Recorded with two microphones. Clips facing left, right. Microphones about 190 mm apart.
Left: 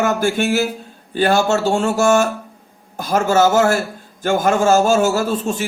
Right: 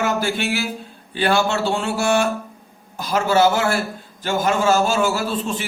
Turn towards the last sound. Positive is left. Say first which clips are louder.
# left 4 dB
turn(degrees=45)  # may be behind; listen again after turning